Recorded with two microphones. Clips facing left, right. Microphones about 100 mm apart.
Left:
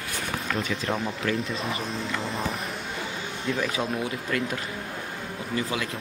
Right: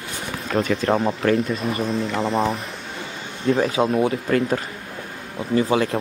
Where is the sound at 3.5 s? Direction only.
35° right (ahead or behind).